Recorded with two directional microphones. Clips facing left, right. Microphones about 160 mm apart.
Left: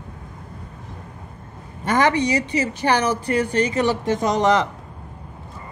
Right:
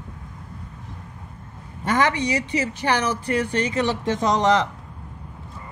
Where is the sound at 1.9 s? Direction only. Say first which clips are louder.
Left 3 dB; 45° left (ahead or behind).